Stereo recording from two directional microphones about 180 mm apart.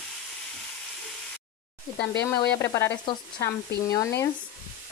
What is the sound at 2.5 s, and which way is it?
Sizzle, 15° left (ahead or behind).